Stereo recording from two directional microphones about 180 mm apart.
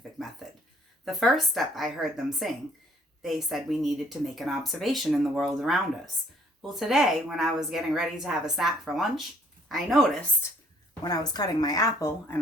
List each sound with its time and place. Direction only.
0.2 s a sound: centre (ahead or behind)
1.0 s speech: centre (ahead or behind)
11.0 s a woman's voice: 20° left (ahead or behind)